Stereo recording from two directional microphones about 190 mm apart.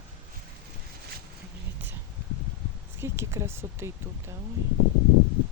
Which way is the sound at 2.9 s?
15° right (ahead or behind).